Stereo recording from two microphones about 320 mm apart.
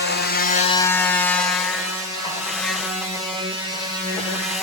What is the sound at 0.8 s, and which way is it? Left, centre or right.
Wood, centre.